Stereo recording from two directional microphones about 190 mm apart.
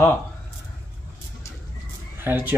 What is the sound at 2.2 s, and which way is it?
Speech, 10° right (ahead or behind).